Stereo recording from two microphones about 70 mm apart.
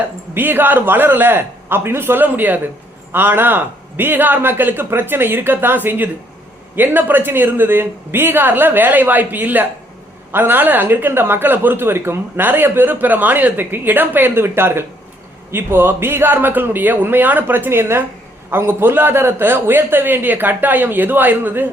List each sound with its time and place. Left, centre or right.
0.3 s a man's voice: right